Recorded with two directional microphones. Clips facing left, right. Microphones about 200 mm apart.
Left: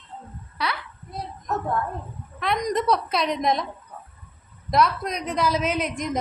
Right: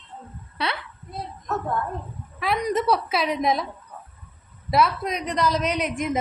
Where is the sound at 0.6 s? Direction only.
25° right (ahead or behind).